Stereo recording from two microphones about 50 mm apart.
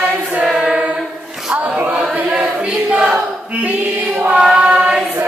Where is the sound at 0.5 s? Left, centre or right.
Centre.